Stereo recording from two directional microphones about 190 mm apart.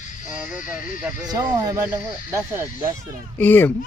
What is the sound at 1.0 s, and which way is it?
Speech, 10° right (ahead or behind).